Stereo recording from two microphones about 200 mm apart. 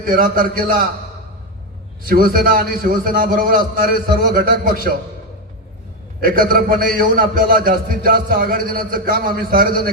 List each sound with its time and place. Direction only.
0.0 s a man's voice: 45° right (ahead or behind)
2.0 s a man's voice: 45° right (ahead or behind)
6.1 s a man's voice: 45° right (ahead or behind)